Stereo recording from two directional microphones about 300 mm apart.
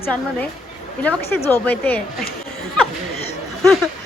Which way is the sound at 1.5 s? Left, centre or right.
Centre.